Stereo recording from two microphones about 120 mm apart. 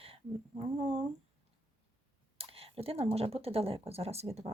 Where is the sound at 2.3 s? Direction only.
55° right (ahead or behind).